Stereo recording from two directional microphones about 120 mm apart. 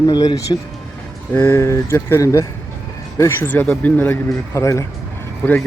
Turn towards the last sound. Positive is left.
turn(degrees=15)  # may be behind; listen again after turning